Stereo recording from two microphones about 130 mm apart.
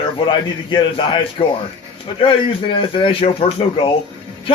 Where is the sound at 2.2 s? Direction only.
40° left (ahead or behind).